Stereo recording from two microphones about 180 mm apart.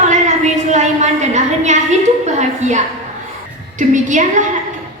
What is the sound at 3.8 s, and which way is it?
Speech, 45° right (ahead or behind).